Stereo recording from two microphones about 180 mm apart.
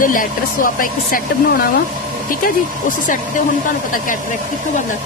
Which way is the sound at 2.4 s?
50° left (ahead or behind).